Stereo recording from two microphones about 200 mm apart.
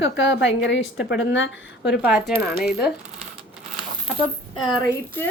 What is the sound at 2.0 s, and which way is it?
Coin, 5° right (ahead or behind).